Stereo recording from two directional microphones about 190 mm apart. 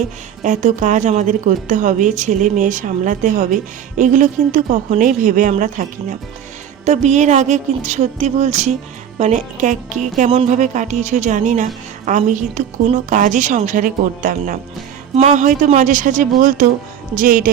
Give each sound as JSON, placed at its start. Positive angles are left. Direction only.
{"t": 0.4, "sound": "a woman's voice", "side_deg": -40}
{"t": 15.1, "sound": "a woman's voice", "side_deg": -35}